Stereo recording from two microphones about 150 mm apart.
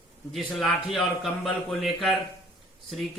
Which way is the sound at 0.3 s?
Centre (ahead or behind).